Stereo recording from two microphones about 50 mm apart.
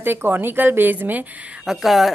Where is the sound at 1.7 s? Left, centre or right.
Centre.